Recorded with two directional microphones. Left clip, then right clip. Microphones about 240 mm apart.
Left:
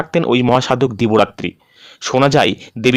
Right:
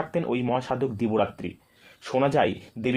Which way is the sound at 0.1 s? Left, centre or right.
Left.